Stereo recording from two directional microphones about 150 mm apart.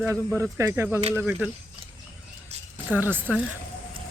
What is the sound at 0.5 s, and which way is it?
Speech, 15° right (ahead or behind).